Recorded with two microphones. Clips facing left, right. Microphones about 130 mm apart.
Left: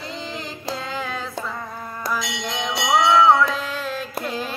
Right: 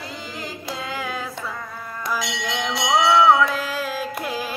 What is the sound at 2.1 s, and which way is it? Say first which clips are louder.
Bell: even; 5° right (ahead or behind).